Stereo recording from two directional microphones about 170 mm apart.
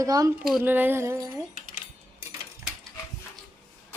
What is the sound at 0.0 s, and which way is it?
Speech, 20° right (ahead or behind).